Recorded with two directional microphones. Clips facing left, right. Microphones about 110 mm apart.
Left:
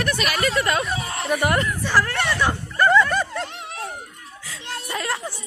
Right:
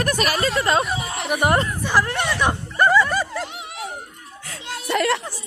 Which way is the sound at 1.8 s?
20° right (ahead or behind).